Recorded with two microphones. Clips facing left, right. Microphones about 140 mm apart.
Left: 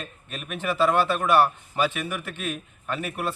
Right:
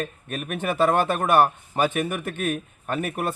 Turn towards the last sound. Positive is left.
turn(degrees=-50)  # may be behind; listen again after turning